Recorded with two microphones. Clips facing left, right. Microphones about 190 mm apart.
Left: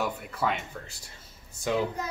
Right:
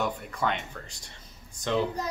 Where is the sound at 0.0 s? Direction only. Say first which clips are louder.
Even; 5° left (ahead or behind).